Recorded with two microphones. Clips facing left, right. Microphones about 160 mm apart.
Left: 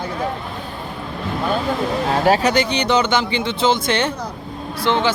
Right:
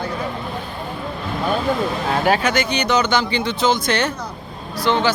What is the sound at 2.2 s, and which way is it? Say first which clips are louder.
Speech: left 3 dB; 35° left (ahead or behind).